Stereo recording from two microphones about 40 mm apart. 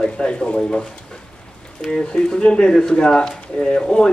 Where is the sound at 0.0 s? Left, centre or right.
Centre.